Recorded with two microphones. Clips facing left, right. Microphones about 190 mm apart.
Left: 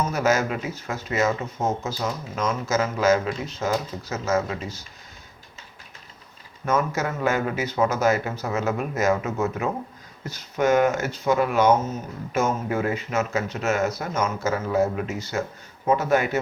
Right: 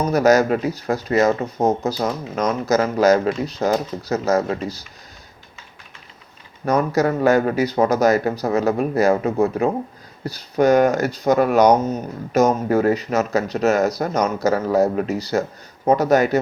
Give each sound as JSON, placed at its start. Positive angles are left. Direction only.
{"t": 0.0, "sound": "speech", "side_deg": -40}
{"t": 6.7, "sound": "speech", "side_deg": -35}